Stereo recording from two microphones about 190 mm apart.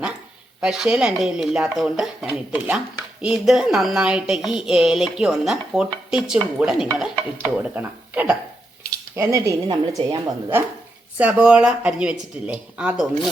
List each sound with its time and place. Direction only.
0.6 s speech: 5° right (ahead or behind); by 10.6 s 20° right (ahead or behind)
11.2 s speech: 5° right (ahead or behind)